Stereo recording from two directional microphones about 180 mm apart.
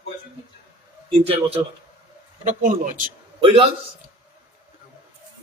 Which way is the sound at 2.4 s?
45° right (ahead or behind).